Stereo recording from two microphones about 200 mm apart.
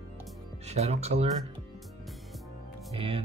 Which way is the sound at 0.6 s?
35° right (ahead or behind).